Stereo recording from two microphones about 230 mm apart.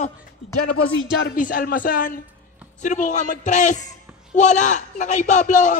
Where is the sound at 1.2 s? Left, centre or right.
Left.